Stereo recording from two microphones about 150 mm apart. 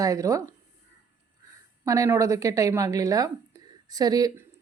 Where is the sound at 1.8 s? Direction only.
20° right (ahead or behind).